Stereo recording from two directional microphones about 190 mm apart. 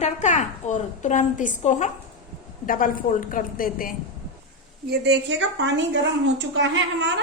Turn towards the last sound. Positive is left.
turn(degrees=-70)  # may be behind; listen again after turning